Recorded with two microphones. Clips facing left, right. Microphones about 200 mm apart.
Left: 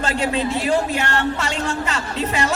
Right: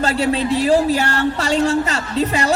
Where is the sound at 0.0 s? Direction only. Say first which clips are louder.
Right 3 dB; 35° right (ahead or behind).